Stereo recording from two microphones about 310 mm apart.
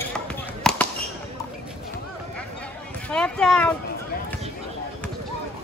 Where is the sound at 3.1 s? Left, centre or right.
Centre.